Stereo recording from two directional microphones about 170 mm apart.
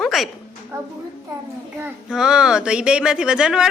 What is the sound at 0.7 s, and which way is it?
Speech, 15° right (ahead or behind).